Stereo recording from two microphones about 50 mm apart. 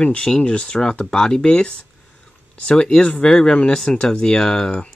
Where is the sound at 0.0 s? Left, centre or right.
Left.